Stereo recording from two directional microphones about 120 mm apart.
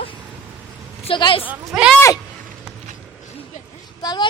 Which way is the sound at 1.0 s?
45° left (ahead or behind).